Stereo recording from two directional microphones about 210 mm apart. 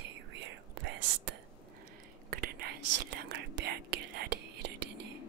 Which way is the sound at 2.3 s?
45° right (ahead or behind).